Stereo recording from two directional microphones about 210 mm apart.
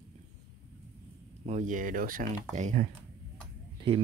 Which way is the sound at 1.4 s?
35° right (ahead or behind).